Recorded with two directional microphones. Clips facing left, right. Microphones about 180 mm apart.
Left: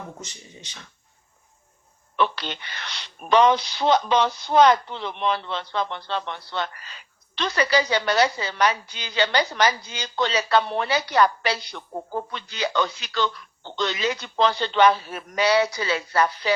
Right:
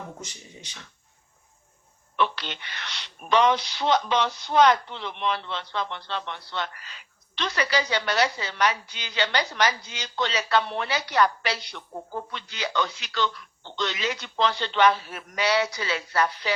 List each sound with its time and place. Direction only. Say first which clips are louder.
2.1 s a woman's voice: left 2 dB; 40° left (ahead or behind)